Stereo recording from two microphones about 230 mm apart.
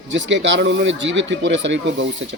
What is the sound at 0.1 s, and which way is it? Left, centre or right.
Speech, right.